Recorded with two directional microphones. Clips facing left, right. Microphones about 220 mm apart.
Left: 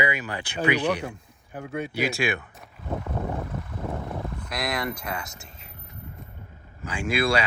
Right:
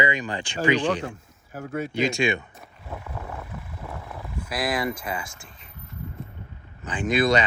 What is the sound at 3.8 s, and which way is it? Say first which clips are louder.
Vehicle: left 7 dB; 30° left (ahead or behind).